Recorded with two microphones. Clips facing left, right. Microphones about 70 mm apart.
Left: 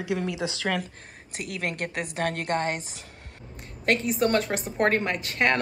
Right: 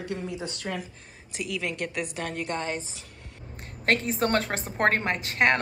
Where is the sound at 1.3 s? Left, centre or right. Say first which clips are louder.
Even; left.